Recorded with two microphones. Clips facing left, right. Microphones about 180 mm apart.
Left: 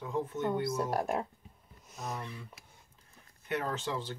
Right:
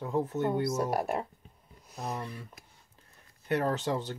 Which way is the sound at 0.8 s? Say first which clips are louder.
Right 2 dB; 10° right (ahead or behind).